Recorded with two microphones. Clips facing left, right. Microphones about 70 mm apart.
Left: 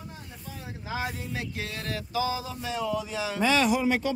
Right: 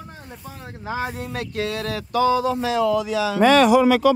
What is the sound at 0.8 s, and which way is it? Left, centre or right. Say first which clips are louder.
Speech: right 6 dB; right.